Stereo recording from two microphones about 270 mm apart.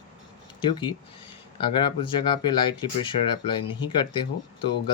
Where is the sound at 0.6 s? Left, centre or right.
Centre.